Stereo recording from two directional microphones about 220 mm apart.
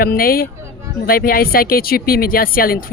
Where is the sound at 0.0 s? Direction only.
40° left (ahead or behind).